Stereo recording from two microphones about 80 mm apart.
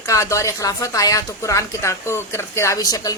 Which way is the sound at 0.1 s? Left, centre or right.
Left.